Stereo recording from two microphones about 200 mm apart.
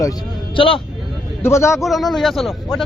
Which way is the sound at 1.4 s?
15° left (ahead or behind).